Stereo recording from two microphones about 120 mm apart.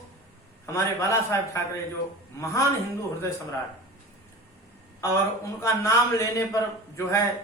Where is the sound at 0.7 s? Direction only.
25° left (ahead or behind).